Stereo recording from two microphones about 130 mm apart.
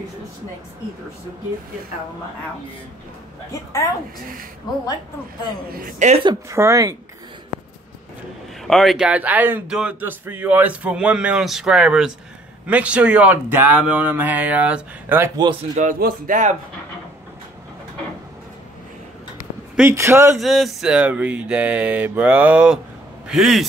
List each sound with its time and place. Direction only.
5.9 s speech: 65° right (ahead or behind)
6.5 s speech: 25° right (ahead or behind)
8.6 s a man's voice: centre (ahead or behind); by 15.3 s 15° right (ahead or behind)
15.7 s speech: 80° right
19.9 s speech: 20° right (ahead or behind)
20.3 s a man's voice: centre (ahead or behind)